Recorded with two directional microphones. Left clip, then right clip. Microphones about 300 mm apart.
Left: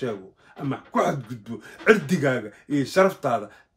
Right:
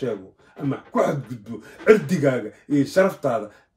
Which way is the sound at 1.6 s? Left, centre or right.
Centre.